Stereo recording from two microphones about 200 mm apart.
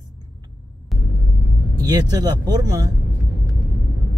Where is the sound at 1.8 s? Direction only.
20° right (ahead or behind).